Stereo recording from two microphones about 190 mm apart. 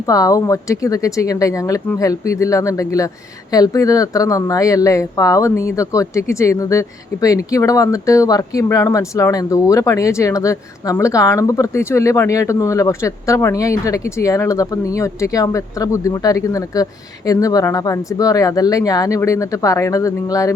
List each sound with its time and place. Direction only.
0.0 s speech: 20° left (ahead or behind)